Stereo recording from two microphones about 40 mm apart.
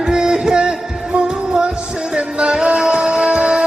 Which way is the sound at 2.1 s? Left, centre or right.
Right.